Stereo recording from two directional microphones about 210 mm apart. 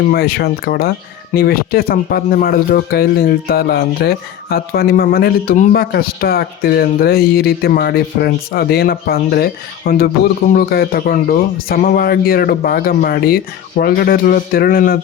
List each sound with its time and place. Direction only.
0.1 s speech: 50° left (ahead or behind)